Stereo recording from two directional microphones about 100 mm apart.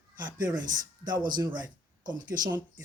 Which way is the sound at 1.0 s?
45° right (ahead or behind).